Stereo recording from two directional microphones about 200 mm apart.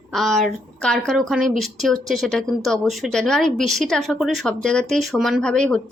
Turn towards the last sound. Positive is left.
turn(degrees=5)  # may be behind; listen again after turning